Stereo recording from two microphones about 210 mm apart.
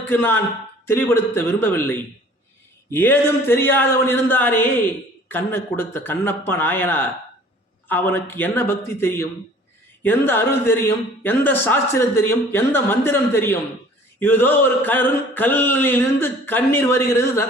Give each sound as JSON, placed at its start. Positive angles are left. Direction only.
{"t": 0.1, "sound": "speech", "side_deg": 10}